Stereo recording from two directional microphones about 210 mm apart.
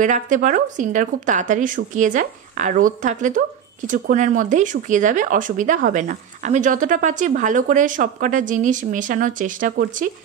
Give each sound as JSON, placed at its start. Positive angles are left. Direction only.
{"t": 0.0, "sound": "a woman's voice", "side_deg": -40}